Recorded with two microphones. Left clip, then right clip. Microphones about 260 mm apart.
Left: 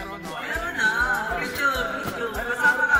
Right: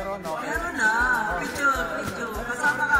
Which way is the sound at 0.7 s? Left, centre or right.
Centre.